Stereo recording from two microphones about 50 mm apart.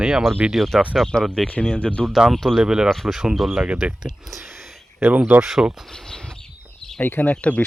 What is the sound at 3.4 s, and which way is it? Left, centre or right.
Speech, centre.